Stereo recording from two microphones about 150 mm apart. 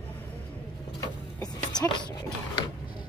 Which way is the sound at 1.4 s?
25° left (ahead or behind).